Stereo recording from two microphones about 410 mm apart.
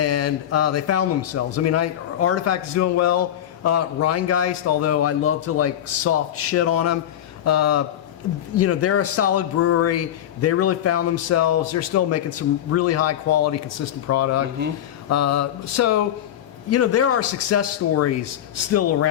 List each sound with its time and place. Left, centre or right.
0.0 s a man's voice: left